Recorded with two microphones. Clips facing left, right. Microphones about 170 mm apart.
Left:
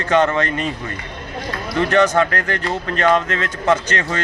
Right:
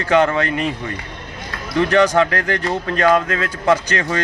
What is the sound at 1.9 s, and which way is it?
A man's voice, 10° right (ahead or behind).